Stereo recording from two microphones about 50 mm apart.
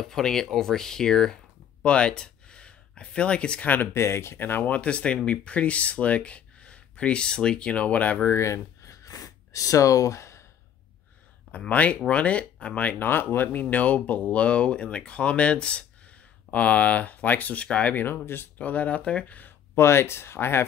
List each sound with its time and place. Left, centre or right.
0.0 s speech: centre
1.9 s speech: left
3.6 s speech: left
3.9 s speech: left
8.3 s speech: left
11.7 s speech: left
13.0 s speech: left
17.6 s speech: left
17.9 s speech: left
18.6 s speech: left
19.7 s speech: left